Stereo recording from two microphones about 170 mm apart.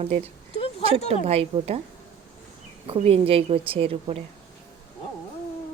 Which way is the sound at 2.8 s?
35° right (ahead or behind).